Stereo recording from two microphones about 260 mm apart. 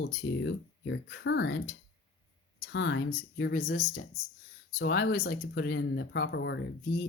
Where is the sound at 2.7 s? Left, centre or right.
Left.